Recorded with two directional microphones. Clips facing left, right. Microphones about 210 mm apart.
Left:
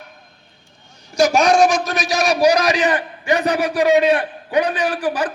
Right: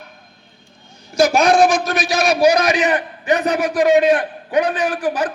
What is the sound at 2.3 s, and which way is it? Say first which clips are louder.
A man's voice: right 1 dB; 35° left (ahead or behind).